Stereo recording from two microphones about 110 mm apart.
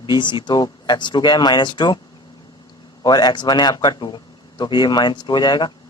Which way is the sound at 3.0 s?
40° left (ahead or behind).